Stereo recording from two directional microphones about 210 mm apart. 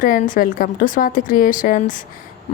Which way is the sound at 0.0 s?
40° left (ahead or behind).